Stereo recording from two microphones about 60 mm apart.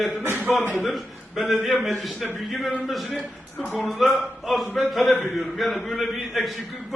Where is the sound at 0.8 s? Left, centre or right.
Centre.